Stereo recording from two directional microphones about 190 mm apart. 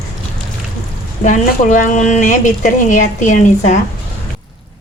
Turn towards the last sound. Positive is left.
turn(degrees=40)  # may be behind; listen again after turning